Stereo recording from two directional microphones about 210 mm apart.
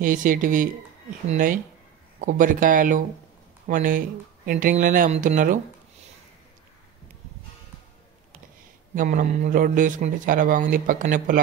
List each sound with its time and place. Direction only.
0.0 s a man's voice: 40° right (ahead or behind)
8.9 s a man's voice: 35° right (ahead or behind)